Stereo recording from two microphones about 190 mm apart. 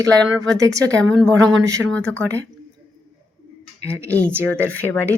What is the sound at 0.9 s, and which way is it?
Speech, 5° left (ahead or behind).